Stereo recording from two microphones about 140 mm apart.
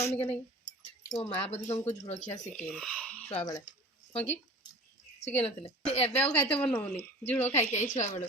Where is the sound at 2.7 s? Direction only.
5° left (ahead or behind).